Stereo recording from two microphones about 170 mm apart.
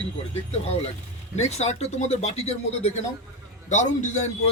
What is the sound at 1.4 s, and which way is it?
A man's voice, 40° left (ahead or behind).